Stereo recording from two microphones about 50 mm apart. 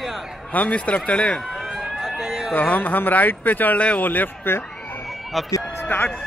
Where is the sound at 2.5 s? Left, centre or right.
Left.